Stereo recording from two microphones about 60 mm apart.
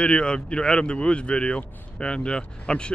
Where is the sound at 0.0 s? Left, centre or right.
Centre.